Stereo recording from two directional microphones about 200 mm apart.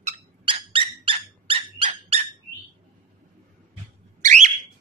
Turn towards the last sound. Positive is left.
turn(degrees=-35)  # may be behind; listen again after turning